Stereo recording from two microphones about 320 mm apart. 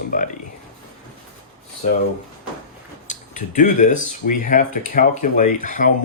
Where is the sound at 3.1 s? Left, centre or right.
Left.